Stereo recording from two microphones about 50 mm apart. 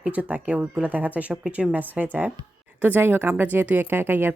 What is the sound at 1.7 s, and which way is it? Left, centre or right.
Speech, right.